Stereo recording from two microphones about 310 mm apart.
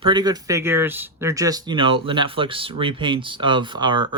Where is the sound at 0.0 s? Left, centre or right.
Centre.